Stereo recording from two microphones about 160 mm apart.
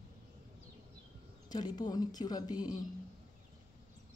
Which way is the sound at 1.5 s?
25° left (ahead or behind).